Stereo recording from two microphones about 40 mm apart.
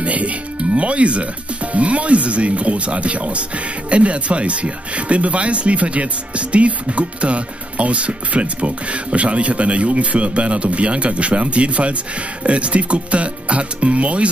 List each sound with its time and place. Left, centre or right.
0.0 s speech: right